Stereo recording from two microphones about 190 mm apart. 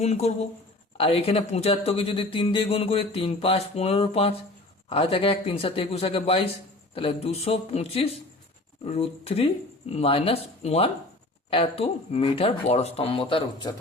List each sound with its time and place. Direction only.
0.0 s speech: 35° left (ahead or behind)